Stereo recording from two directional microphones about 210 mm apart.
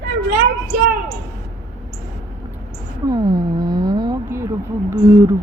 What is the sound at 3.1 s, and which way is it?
Speech, 15° right (ahead or behind).